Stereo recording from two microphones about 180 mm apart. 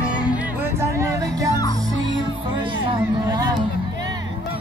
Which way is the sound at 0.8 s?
15° right (ahead or behind).